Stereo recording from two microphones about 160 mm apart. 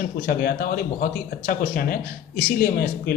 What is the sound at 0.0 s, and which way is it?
A man's voice, 70° left (ahead or behind).